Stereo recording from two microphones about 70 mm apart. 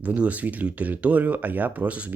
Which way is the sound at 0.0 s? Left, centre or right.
Right.